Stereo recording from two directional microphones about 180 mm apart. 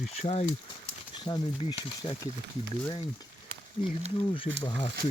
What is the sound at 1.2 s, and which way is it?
Speech, 20° left (ahead or behind).